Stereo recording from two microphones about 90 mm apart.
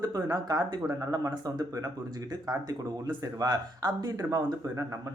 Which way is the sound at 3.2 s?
45° right (ahead or behind).